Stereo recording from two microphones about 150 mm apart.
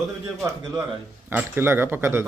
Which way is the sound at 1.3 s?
15° right (ahead or behind).